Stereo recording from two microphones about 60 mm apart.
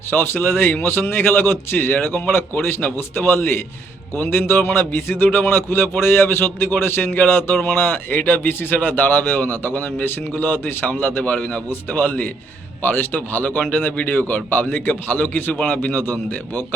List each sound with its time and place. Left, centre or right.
0.1 s a man's voice: left